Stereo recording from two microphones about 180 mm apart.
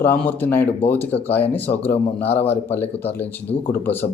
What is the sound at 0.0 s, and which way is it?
A man's voice, 10° left (ahead or behind).